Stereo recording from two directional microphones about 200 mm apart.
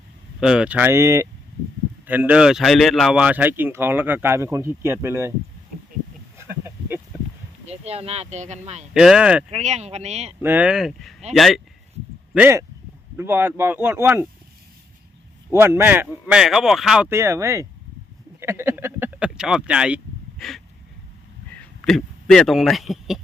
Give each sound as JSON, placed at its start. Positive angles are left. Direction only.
{"t": 0.3, "sound": "speech", "side_deg": -5}
{"t": 6.3, "sound": "a sound", "side_deg": -10}
{"t": 7.7, "sound": "speech", "side_deg": -30}
{"t": 8.9, "sound": "speech", "side_deg": 0}
{"t": 9.5, "sound": "speech", "side_deg": -35}
{"t": 10.4, "sound": "speech", "side_deg": -10}
{"t": 12.3, "sound": "speech", "side_deg": -10}
{"t": 15.5, "sound": "speech", "side_deg": -10}
{"t": 21.5, "sound": "a man's voice", "side_deg": 5}